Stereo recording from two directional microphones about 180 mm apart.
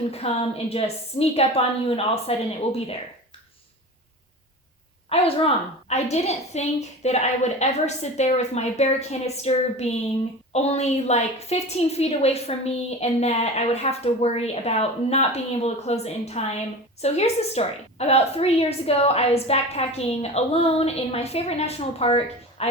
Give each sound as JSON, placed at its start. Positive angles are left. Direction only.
{"t": 0.1, "sound": "a woman's voice", "side_deg": 35}
{"t": 5.0, "sound": "a woman's voice", "side_deg": 35}